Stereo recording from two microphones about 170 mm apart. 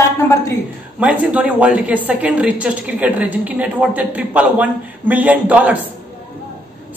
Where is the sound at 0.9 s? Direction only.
5° right (ahead or behind).